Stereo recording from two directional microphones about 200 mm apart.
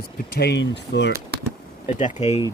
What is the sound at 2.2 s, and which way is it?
Speech, 30° left (ahead or behind).